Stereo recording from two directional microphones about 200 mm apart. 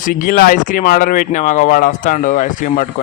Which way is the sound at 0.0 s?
45° left (ahead or behind).